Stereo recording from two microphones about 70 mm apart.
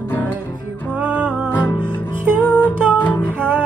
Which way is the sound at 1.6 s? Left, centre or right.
Left.